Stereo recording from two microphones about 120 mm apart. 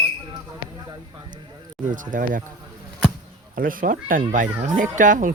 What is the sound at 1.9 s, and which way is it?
Speech, 90° right.